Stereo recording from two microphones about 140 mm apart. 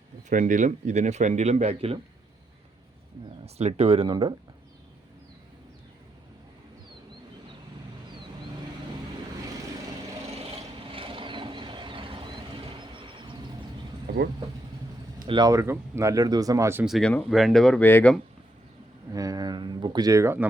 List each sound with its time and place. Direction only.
0.3 s speech: 65° right (ahead or behind); by 2.0 s 50° right (ahead or behind)
3.4 s speech: 50° right (ahead or behind)
10.3 s vehicle: 40° right (ahead or behind)
15.3 s speech: 30° right (ahead or behind)
16.8 s speech: centre (ahead or behind)
17.8 s speech: 15° left (ahead or behind)
19.1 s speech: 25° right (ahead or behind)